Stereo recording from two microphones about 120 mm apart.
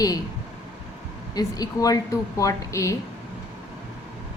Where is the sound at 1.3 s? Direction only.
30° left (ahead or behind).